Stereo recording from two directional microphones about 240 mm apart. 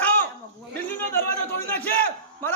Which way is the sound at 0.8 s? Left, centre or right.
Centre.